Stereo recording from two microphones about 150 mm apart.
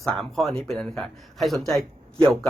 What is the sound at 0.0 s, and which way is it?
Speech, 5° left (ahead or behind).